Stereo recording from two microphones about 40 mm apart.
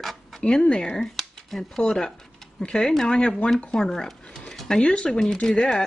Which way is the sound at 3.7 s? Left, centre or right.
Centre.